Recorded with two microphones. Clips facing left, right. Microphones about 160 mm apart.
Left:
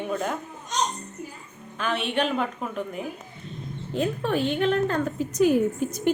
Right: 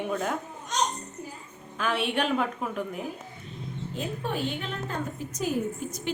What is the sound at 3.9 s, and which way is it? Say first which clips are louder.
A woman's voice: left 7 dB; 75° left (ahead or behind).